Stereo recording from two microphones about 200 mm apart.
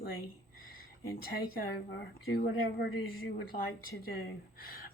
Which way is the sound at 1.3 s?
45° left (ahead or behind).